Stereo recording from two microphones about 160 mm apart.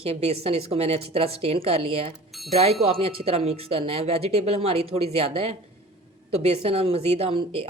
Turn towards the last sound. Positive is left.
turn(degrees=-35)  # may be behind; listen again after turning